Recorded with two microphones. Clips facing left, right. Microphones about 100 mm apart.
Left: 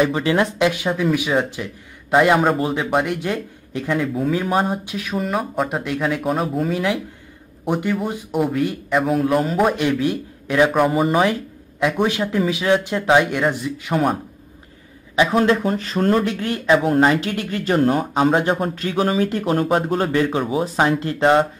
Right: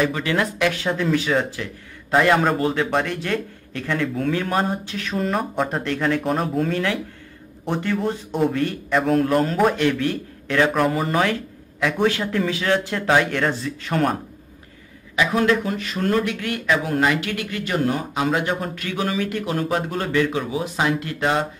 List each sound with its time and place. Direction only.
0.0 s speech: 25° left (ahead or behind)
15.1 s speech: 30° left (ahead or behind)